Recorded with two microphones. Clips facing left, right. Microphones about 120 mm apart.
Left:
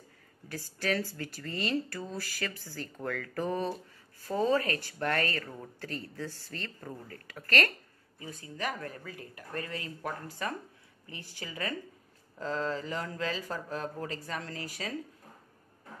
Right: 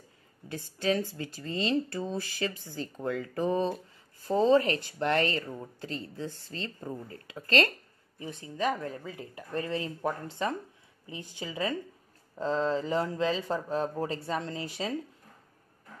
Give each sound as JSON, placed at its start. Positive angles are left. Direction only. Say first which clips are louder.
{"t": 0.5, "sound": "speech", "louder": "right 3 dB", "side_deg": -20}